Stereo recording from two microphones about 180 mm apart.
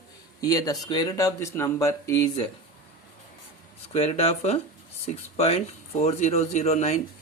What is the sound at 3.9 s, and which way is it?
Speech, 35° left (ahead or behind).